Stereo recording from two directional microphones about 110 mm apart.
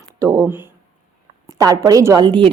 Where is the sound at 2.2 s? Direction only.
45° right (ahead or behind).